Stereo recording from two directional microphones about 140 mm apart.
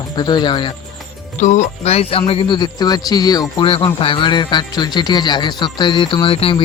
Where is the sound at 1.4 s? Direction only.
55° left (ahead or behind); by 6.6 s 40° left (ahead or behind).